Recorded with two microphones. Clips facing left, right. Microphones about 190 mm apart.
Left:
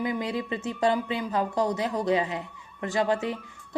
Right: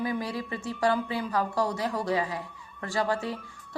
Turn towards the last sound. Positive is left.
turn(degrees=20)  # may be behind; listen again after turning